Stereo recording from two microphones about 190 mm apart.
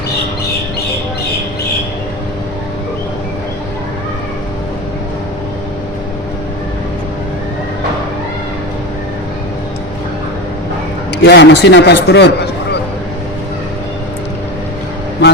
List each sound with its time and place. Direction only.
11.2 s speech: 60° left (ahead or behind)